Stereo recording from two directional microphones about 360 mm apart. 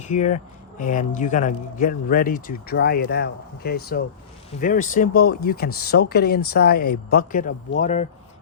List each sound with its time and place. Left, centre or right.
0.0 s speech: centre